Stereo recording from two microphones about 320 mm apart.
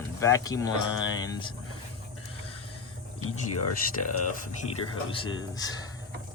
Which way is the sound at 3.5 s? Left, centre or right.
Left.